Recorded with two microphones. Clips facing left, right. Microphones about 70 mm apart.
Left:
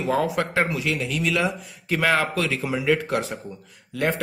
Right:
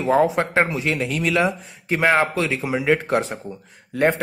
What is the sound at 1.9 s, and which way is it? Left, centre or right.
Speech, right.